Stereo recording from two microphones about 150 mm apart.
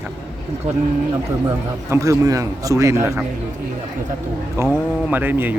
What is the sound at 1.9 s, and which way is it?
A man's voice, 20° right (ahead or behind).